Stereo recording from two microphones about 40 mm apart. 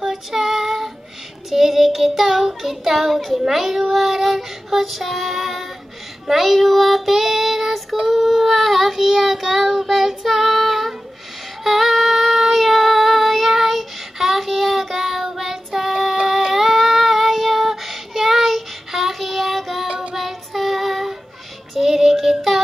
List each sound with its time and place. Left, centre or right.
0.1 s child singing: centre
19.9 s child singing: right
20.2 s child singing: centre